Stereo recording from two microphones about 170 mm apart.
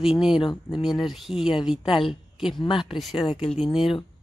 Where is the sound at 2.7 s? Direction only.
30° left (ahead or behind).